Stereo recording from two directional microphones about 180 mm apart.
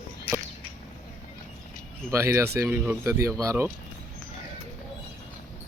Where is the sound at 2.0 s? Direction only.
15° right (ahead or behind).